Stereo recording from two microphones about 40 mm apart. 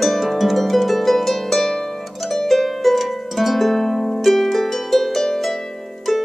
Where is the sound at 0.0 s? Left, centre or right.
Centre.